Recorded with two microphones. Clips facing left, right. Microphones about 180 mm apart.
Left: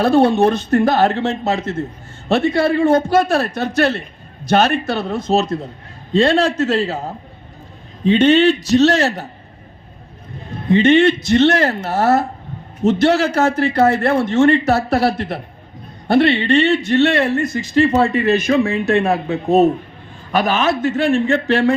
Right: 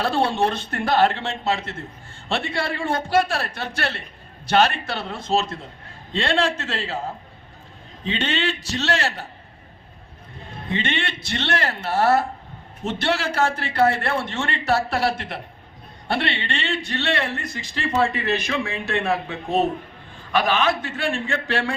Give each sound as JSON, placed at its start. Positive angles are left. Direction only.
{"t": 0.0, "sound": "a man's voice", "side_deg": 45}
{"t": 10.7, "sound": "a man's voice", "side_deg": 40}